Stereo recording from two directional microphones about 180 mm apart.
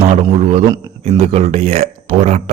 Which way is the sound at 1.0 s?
35° right (ahead or behind).